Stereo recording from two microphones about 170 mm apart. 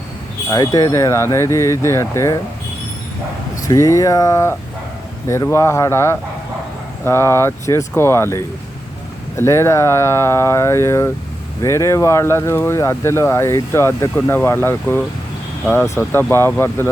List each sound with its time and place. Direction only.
0.5 s speech: 20° left (ahead or behind)
3.7 s speech: 20° left (ahead or behind)